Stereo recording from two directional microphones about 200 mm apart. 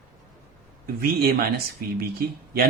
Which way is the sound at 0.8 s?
50° right (ahead or behind).